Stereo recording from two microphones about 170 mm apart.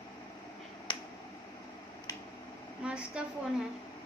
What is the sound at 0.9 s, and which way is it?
Finger snapping, 25° left (ahead or behind).